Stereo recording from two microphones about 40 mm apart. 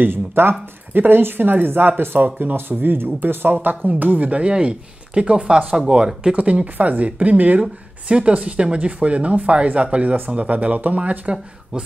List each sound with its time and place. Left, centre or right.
0.0 s speech: right
2.7 s speech: right
4.3 s speech: right
6.3 s speech: right
8.1 s speech: right